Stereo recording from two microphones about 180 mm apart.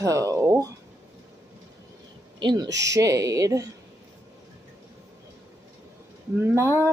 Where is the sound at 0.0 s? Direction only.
20° right (ahead or behind).